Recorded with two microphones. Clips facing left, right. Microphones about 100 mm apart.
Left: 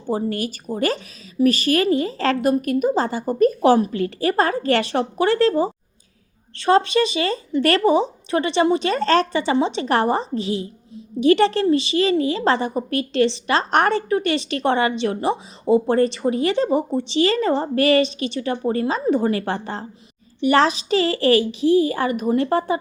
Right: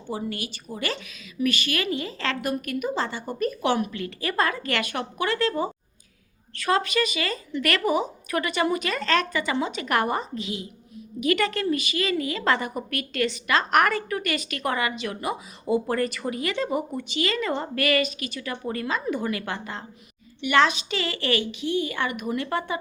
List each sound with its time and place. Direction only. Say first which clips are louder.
0.1 s speech: left 8 dB; 40° left (ahead or behind)